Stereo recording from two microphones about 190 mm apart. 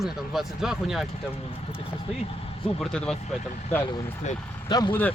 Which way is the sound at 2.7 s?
5° left (ahead or behind).